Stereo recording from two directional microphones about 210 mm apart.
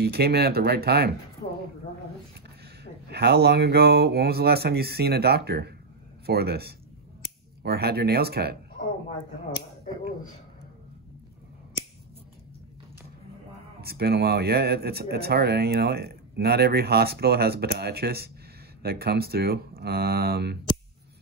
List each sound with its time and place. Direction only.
0.0 s speech: 50° right (ahead or behind)
2.8 s speech: 50° right (ahead or behind)
13.7 s speech: 50° right (ahead or behind)